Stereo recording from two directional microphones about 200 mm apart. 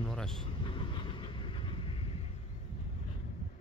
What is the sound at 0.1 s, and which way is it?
Vehicle, 5° left (ahead or behind).